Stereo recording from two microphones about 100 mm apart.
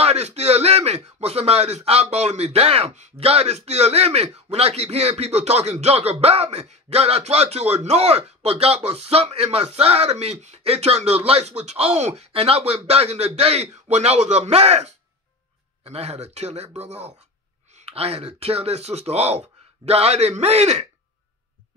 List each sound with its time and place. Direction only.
0.0 s speech: 90° right